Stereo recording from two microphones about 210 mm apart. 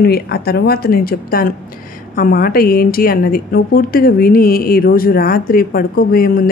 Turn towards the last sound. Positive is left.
turn(degrees=45)  # may be behind; listen again after turning